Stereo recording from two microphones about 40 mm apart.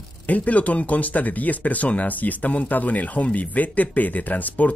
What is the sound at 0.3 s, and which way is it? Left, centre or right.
Speech, left.